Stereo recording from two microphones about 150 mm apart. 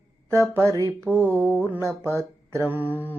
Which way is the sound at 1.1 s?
15° right (ahead or behind).